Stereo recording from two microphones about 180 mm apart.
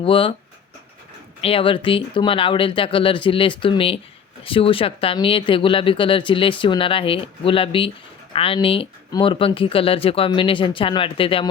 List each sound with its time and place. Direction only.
0.0 s speech: 30° left (ahead or behind)
1.4 s speech: 30° left (ahead or behind)